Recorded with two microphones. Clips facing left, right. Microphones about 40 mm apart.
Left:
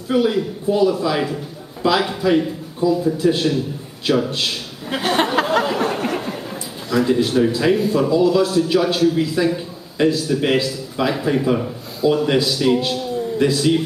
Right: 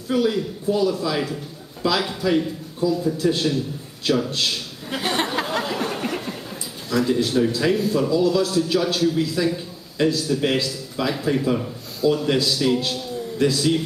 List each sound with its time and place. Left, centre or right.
0.1 s a man's voice: centre